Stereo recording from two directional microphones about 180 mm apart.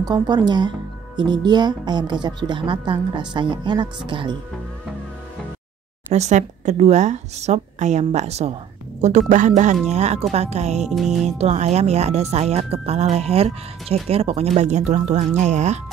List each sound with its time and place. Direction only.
0.0 s speech: 25° right (ahead or behind)
6.1 s speech: 40° right (ahead or behind)